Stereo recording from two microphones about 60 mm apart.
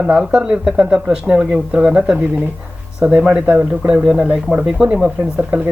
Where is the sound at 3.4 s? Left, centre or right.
Right.